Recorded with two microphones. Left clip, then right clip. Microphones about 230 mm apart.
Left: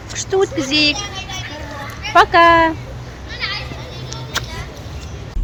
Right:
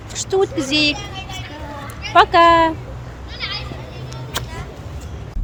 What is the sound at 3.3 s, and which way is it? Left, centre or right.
Children playing, right.